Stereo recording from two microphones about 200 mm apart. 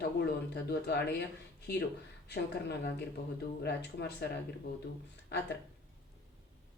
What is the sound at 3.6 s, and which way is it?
Speech, 55° left (ahead or behind).